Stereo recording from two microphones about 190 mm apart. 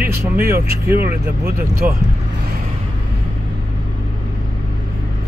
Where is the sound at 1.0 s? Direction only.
55° right (ahead or behind).